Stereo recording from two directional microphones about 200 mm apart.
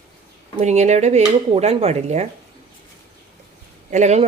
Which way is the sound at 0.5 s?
35° right (ahead or behind).